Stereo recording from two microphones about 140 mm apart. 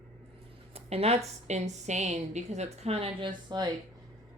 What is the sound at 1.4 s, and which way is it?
Speech, 55° right (ahead or behind).